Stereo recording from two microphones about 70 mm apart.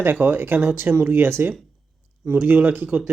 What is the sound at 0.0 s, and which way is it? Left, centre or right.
Speech, right.